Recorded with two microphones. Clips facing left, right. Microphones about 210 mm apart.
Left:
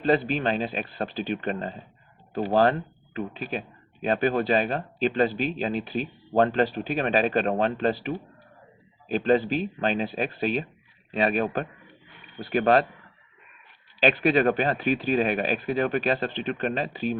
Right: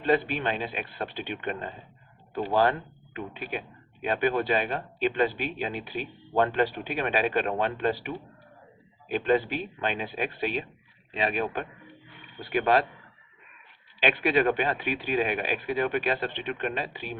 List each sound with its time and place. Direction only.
0.0 s speech: 35° left (ahead or behind)
14.0 s speech: 40° left (ahead or behind)